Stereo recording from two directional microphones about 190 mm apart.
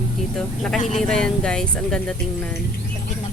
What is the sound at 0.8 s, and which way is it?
Speech, 35° left (ahead or behind).